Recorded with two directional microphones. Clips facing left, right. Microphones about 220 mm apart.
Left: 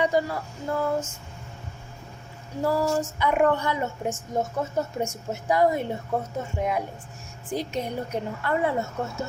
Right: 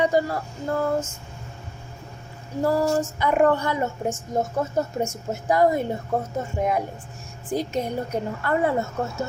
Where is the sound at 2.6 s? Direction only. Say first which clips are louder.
Right 3 dB; 45° right (ahead or behind).